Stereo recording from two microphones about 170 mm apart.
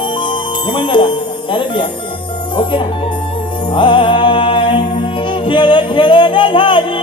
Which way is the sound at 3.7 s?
30° left (ahead or behind).